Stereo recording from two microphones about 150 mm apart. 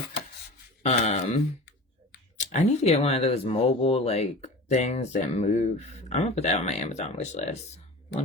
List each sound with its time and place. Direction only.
0.8 s speech: 50° left (ahead or behind)
2.4 s speech: 50° left (ahead or behind)